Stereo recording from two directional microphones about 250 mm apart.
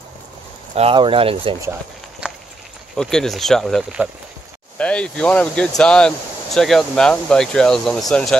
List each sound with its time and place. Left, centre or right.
0.7 s speech: right
1.7 s a sound: centre
3.0 s speech: centre